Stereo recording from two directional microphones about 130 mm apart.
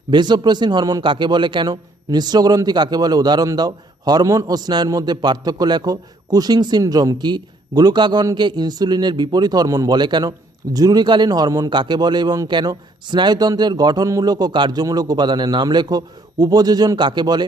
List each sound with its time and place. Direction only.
0.1 s a man's voice: 35° right (ahead or behind)